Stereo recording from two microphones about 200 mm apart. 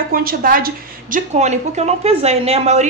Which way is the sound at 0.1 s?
45° right (ahead or behind).